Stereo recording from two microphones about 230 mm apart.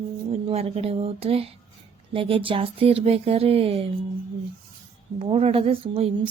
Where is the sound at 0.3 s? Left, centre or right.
Right.